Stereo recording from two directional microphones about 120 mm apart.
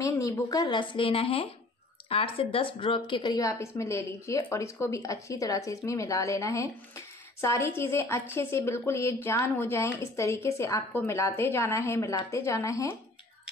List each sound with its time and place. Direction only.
0.0 s a woman's voice: 30° left (ahead or behind)